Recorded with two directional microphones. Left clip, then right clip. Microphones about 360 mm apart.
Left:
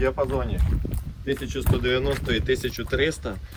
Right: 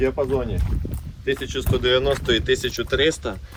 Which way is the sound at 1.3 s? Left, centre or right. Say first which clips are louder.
Right 4 dB; centre.